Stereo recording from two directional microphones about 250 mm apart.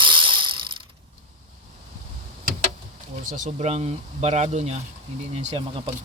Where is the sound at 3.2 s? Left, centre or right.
Right.